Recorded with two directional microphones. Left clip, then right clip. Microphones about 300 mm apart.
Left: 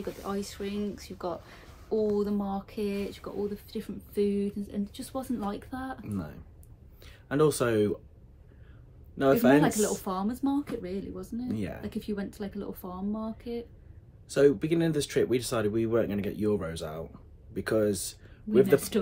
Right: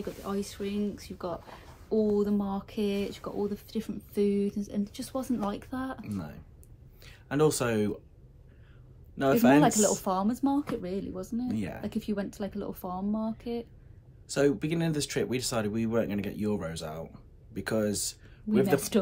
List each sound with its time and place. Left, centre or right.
0.0 s speech: centre
6.0 s speech: centre
9.1 s speech: centre
9.6 s speech: centre
11.4 s speech: centre
11.8 s speech: centre
14.2 s speech: centre